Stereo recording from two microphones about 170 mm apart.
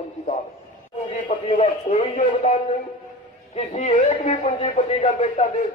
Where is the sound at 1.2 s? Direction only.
45° left (ahead or behind).